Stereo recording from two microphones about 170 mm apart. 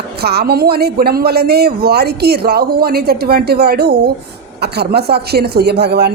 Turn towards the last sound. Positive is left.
turn(degrees=-75)  # may be behind; listen again after turning